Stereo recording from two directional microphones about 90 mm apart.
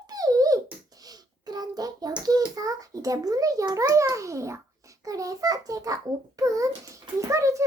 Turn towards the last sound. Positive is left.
turn(degrees=-35)  # may be behind; listen again after turning